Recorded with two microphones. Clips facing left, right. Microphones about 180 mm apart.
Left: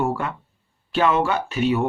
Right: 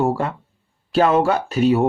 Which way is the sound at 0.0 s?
35° right (ahead or behind).